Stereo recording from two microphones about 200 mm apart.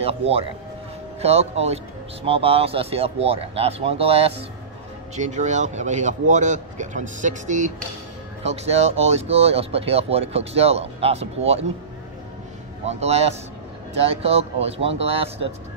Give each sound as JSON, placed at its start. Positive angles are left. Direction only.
{"t": 1.2, "sound": "a man's voice", "side_deg": -30}
{"t": 12.8, "sound": "a man's voice", "side_deg": -35}